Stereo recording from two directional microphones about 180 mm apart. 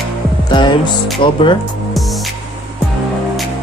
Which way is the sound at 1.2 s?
30° left (ahead or behind).